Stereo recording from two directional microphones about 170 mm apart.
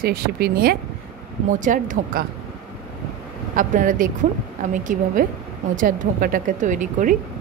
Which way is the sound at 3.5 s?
50° right (ahead or behind).